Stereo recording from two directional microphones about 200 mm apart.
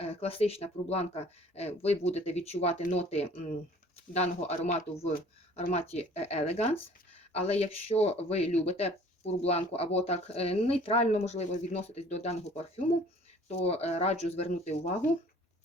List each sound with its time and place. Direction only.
0.0 s speech: 30° left (ahead or behind)